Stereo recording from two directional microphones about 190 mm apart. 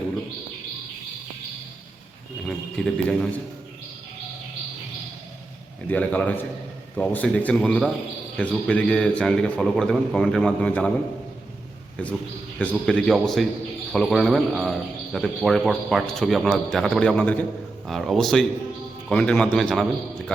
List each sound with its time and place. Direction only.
2.5 s a sound: 5° left (ahead or behind)
5.9 s a man's voice: 10° left (ahead or behind)
12.0 s a man's voice: 5° left (ahead or behind)